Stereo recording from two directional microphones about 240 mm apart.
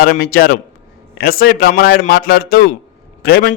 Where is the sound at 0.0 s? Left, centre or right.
Left.